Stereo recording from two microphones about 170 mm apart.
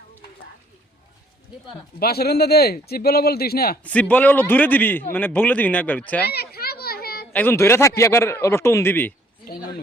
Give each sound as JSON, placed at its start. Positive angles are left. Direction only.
{"t": 2.0, "sound": "speech", "side_deg": 65}
{"t": 3.8, "sound": "a man's voice", "side_deg": 10}
{"t": 6.2, "sound": "children playing", "side_deg": 70}
{"t": 7.3, "sound": "a man's voice", "side_deg": 15}